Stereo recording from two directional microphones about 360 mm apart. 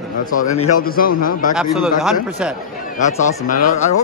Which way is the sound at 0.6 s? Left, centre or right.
Left.